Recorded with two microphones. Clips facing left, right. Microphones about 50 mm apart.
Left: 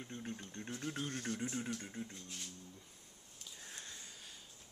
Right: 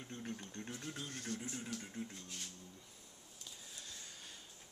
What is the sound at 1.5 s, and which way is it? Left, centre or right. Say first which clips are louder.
Speech: left 4 dB; left.